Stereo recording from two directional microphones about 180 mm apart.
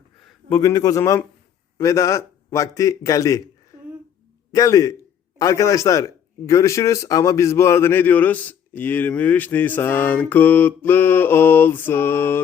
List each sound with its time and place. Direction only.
0.5 s a man's voice: 20° left (ahead or behind)
4.5 s a man's voice: 20° left (ahead or behind)